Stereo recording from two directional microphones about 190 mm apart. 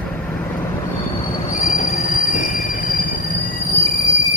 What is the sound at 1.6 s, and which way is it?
Train, 40° left (ahead or behind).